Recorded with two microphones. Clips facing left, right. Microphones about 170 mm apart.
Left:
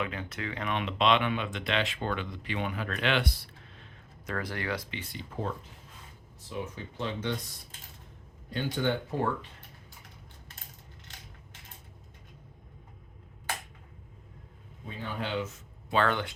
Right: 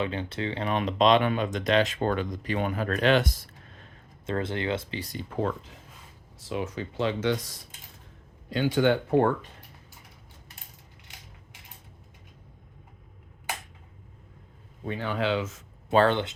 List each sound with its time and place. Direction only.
0.0 s speech: 30° right (ahead or behind)
4.3 s speech: 25° right (ahead or behind)
6.4 s speech: 90° right; by 9.3 s 65° right (ahead or behind)
14.8 s speech: 80° right
16.0 s speech: 25° right (ahead or behind)